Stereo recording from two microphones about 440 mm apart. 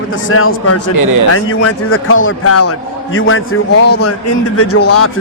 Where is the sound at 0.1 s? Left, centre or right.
Left.